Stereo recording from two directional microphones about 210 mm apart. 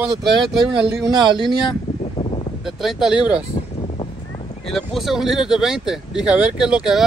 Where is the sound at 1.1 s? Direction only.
20° right (ahead or behind).